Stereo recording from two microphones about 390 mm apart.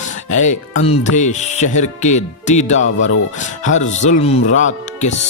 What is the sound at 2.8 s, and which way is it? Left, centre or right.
Speech, left.